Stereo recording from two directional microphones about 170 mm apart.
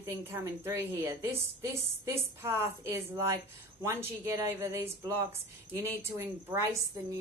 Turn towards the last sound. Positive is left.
turn(degrees=-15)  # may be behind; listen again after turning